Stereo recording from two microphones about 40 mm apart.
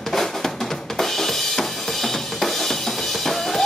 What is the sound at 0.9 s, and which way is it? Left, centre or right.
Drum kit, centre.